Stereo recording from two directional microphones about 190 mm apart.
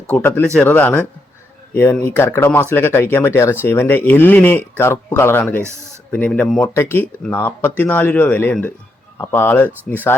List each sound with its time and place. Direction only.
0.1 s speech: 10° left (ahead or behind)